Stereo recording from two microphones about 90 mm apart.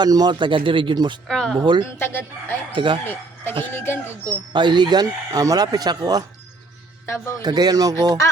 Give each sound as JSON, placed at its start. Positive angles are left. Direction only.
{"t": 0.0, "sound": "speech", "side_deg": -50}
{"t": 1.3, "sound": "speech", "side_deg": 5}
{"t": 1.6, "sound": "speech", "side_deg": -65}
{"t": 2.0, "sound": "speech", "side_deg": 25}
{"t": 2.7, "sound": "speech", "side_deg": -70}
{"t": 3.0, "sound": "speech", "side_deg": 25}
{"t": 4.5, "sound": "speech", "side_deg": -60}
{"t": 7.4, "sound": "speech", "side_deg": -50}